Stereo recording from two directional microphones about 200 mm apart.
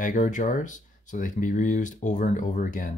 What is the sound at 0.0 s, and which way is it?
Speech, 40° left (ahead or behind).